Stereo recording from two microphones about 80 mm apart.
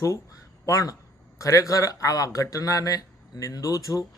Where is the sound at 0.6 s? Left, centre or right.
Left.